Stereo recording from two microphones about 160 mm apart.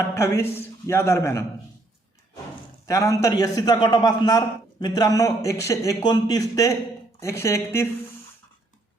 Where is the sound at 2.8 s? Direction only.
20° left (ahead or behind).